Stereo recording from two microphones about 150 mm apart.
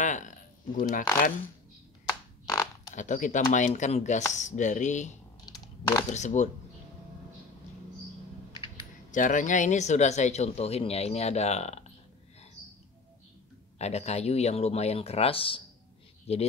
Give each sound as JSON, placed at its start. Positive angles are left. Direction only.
{"t": 0.0, "sound": "a sound", "side_deg": 55}
{"t": 0.7, "sound": "speech", "side_deg": 60}
{"t": 2.4, "sound": "a sound", "side_deg": 25}
{"t": 2.9, "sound": "speech", "side_deg": 55}
{"t": 6.1, "sound": "speech", "side_deg": 50}
{"t": 9.1, "sound": "speech", "side_deg": 60}
{"t": 13.7, "sound": "speech", "side_deg": 45}